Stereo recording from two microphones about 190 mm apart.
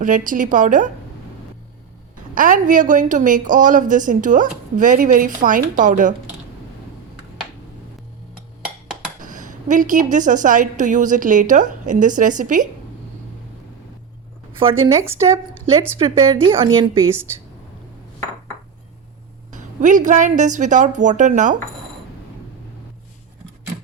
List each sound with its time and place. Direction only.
0.0 s a woman's voice: 45° right (ahead or behind)
2.3 s a woman's voice: 45° right (ahead or behind)
9.2 s a woman's voice: 45° right (ahead or behind)
14.6 s a woman's voice: 30° right (ahead or behind)
16.0 s a woman's voice: 25° right (ahead or behind)
19.5 s a woman's voice: 40° right (ahead or behind)